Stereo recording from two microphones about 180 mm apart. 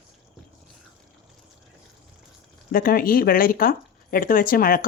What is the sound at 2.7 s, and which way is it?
Speech, 55° left (ahead or behind).